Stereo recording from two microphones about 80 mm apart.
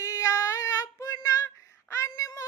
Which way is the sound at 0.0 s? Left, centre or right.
Left.